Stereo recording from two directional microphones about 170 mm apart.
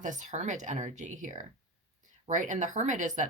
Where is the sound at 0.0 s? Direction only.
45° right (ahead or behind).